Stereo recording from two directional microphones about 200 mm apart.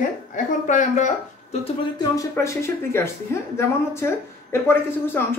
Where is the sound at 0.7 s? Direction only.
35° left (ahead or behind).